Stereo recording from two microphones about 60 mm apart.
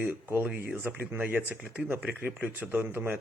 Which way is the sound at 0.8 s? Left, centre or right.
Right.